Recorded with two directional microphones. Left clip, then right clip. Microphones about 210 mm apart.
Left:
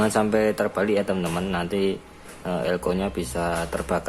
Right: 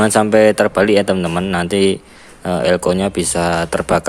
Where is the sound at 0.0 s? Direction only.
35° right (ahead or behind).